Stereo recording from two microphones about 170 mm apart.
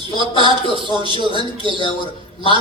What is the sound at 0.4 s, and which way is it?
Speech, 30° right (ahead or behind).